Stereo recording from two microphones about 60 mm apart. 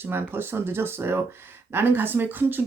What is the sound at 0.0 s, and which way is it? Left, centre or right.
Speech, right.